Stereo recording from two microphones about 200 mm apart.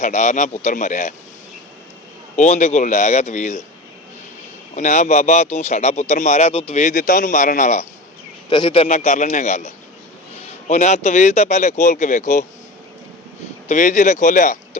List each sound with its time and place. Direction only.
0.0 s speech: 35° left (ahead or behind)
2.3 s speech: 35° left (ahead or behind)
4.7 s speech: 35° left (ahead or behind)
8.4 s speech: 25° left (ahead or behind)
13.7 s speech: 35° left (ahead or behind)